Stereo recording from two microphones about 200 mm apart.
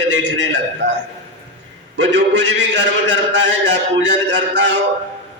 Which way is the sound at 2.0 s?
65° right (ahead or behind).